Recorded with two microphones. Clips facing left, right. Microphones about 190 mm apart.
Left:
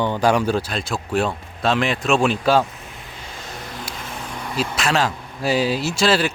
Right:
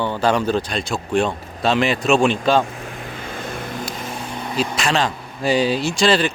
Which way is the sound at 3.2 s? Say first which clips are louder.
Right 7 dB; 55° right (ahead or behind).